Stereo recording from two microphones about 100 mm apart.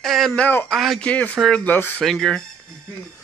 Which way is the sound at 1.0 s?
15° left (ahead or behind).